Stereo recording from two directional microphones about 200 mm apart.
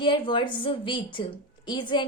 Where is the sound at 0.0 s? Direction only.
25° left (ahead or behind).